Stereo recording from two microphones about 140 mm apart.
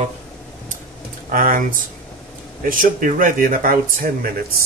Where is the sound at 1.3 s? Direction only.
75° right (ahead or behind).